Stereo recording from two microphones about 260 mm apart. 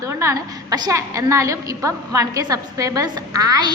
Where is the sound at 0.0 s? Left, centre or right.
Centre.